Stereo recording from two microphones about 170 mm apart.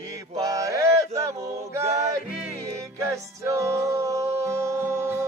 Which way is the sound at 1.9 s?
40° right (ahead or behind).